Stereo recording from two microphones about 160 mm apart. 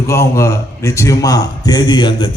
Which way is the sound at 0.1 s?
15° left (ahead or behind).